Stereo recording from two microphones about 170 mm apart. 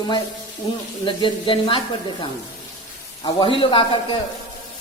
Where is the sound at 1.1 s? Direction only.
30° left (ahead or behind).